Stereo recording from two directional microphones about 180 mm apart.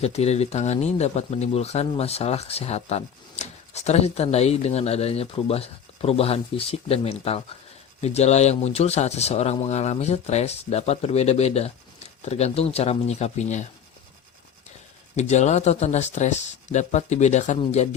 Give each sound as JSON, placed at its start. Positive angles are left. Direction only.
{"t": 0.0, "sound": "speech", "side_deg": 35}
{"t": 15.1, "sound": "speech", "side_deg": 40}